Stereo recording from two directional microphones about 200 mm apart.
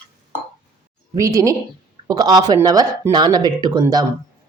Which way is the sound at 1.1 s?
15° right (ahead or behind).